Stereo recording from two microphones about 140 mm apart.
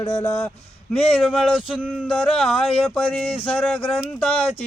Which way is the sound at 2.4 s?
10° left (ahead or behind).